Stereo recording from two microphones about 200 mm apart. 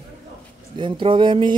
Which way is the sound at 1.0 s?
25° right (ahead or behind).